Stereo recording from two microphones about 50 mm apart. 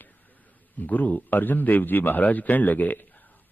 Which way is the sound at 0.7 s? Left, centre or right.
Left.